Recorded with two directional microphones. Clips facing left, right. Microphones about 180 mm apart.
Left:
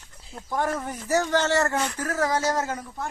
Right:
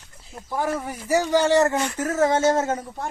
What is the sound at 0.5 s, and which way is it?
Speech, 5° right (ahead or behind).